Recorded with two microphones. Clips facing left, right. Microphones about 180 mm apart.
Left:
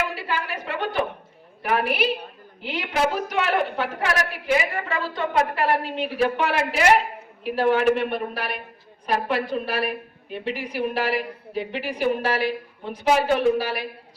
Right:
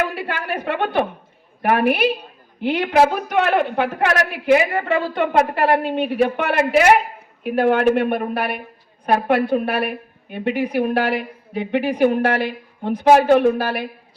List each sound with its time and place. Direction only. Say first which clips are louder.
0.0 s a woman's voice: right 4 dB; 55° right (ahead or behind)